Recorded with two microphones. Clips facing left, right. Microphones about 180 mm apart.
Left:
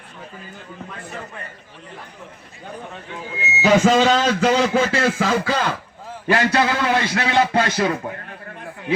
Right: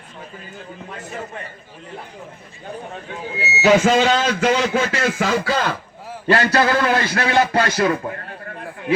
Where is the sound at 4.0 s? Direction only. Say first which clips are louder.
Left 1 dB; 35° left (ahead or behind).